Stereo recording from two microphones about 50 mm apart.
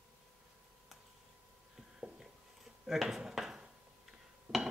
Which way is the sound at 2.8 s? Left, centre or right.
Centre.